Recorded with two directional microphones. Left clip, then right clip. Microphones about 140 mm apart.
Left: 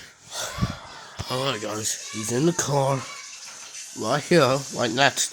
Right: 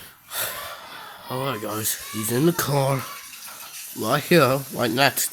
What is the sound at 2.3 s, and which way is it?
Speech, 10° right (ahead or behind).